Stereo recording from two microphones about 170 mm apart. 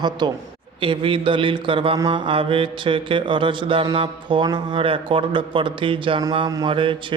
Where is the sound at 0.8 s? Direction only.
30° right (ahead or behind).